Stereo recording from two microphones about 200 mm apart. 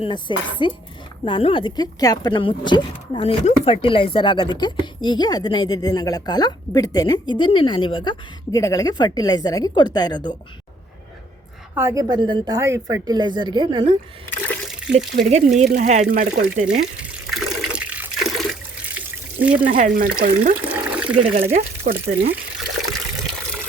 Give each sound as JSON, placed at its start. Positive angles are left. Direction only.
{"t": 0.0, "sound": "speech", "side_deg": 25}
{"t": 11.7, "sound": "a woman's voice", "side_deg": -15}
{"t": 15.3, "sound": "speech", "side_deg": -35}
{"t": 17.0, "sound": "water", "side_deg": -5}
{"t": 19.6, "sound": "speech", "side_deg": -40}
{"t": 20.6, "sound": "water", "side_deg": -5}
{"t": 21.5, "sound": "speech", "side_deg": -45}
{"t": 22.5, "sound": "water", "side_deg": 0}